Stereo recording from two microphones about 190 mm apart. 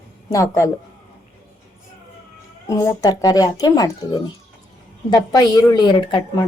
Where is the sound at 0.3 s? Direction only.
15° left (ahead or behind).